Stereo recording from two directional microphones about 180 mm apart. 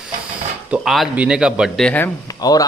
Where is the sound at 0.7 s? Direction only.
Centre (ahead or behind).